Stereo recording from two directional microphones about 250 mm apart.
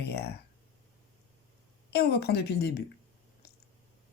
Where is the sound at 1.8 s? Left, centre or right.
Left.